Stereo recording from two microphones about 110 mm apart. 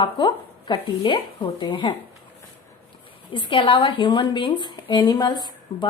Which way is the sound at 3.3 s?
50° left (ahead or behind).